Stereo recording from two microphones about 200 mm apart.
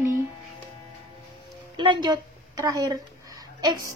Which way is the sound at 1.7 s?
25° right (ahead or behind).